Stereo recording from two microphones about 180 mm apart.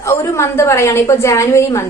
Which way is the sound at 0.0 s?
15° left (ahead or behind).